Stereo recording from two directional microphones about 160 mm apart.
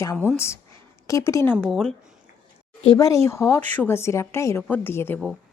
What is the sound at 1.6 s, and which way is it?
Speech, 5° left (ahead or behind).